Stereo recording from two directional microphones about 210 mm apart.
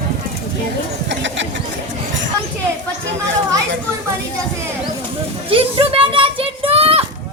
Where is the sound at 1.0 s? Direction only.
60° right (ahead or behind).